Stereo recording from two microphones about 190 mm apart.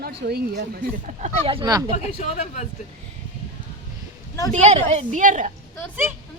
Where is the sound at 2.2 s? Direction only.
35° left (ahead or behind).